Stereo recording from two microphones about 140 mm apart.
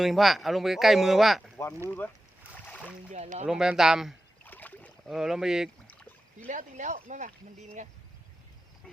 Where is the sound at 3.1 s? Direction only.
55° right (ahead or behind).